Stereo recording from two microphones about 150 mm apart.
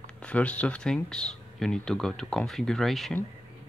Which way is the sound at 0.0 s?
10° left (ahead or behind).